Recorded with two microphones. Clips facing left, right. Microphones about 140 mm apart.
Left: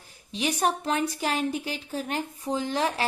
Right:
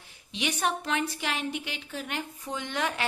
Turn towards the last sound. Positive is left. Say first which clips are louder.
# left 4 dB
turn(degrees=35)  # may be behind; listen again after turning